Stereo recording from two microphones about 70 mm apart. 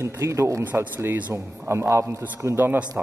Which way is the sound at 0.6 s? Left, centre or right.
Right.